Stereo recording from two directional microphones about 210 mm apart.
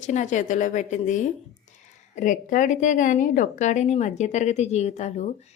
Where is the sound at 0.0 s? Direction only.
35° left (ahead or behind).